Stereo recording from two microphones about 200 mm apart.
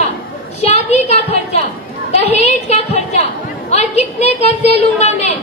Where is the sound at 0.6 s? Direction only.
30° left (ahead or behind).